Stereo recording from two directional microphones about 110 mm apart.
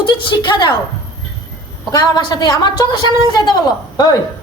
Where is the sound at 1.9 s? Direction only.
40° left (ahead or behind).